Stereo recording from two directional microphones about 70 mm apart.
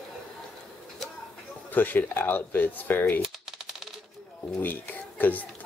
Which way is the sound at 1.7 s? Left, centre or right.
Left.